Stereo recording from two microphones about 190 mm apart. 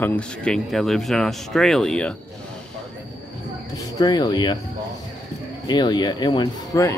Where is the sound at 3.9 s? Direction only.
20° left (ahead or behind).